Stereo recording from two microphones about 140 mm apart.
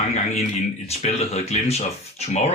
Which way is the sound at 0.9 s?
50° left (ahead or behind).